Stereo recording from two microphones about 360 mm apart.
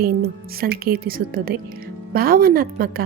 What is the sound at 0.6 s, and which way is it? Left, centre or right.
Speech, right.